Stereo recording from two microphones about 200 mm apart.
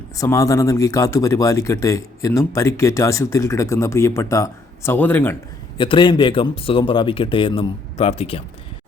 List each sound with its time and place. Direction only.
0.2 s speech: 15° left (ahead or behind)
5.7 s speech: 25° left (ahead or behind)